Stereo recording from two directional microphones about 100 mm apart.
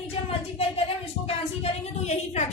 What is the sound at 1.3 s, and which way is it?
A woman's voice, 90° left.